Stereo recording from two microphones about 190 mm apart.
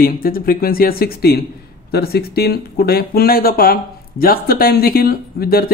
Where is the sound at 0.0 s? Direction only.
50° left (ahead or behind).